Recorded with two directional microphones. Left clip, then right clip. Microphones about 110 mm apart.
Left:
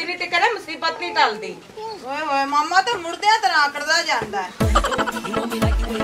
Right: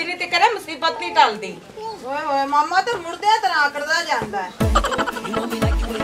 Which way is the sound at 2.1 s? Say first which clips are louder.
Right 1 dB; 15° left (ahead or behind).